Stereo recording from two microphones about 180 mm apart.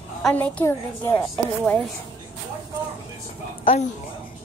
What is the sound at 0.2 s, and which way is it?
A woman's voice, 10° left (ahead or behind).